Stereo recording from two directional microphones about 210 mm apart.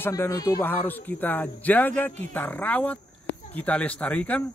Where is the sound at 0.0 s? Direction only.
10° left (ahead or behind).